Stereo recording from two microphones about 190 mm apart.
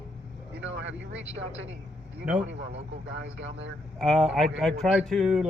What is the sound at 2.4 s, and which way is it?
A man's voice, 75° right (ahead or behind).